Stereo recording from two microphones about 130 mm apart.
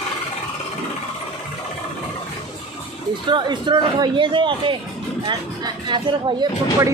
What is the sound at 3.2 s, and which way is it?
A man's voice, 35° right (ahead or behind).